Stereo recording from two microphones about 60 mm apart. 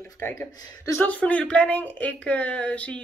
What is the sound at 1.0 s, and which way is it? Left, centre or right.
Speech, left.